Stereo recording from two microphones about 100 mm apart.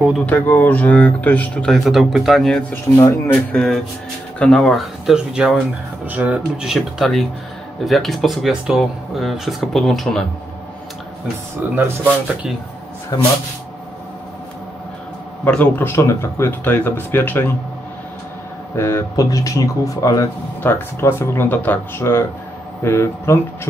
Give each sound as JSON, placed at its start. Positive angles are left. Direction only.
{"t": 0.3, "sound": "speech", "side_deg": 20}
{"t": 1.9, "sound": "speech", "side_deg": 0}
{"t": 2.7, "sound": "speech", "side_deg": 30}
{"t": 3.5, "sound": "speech", "side_deg": 5}
{"t": 5.0, "sound": "speech", "side_deg": -5}
{"t": 11.6, "sound": "speech", "side_deg": -15}
{"t": 13.1, "sound": "speech", "side_deg": 40}
{"t": 15.4, "sound": "speech", "side_deg": 15}
{"t": 18.8, "sound": "speech", "side_deg": 25}
{"t": 20.6, "sound": "speech", "side_deg": 25}